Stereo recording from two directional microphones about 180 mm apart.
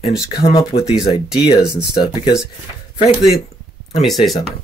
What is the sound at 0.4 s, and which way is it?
Speech, 25° left (ahead or behind).